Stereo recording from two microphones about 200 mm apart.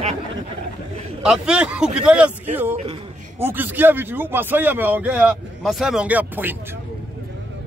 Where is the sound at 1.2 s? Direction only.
5° right (ahead or behind).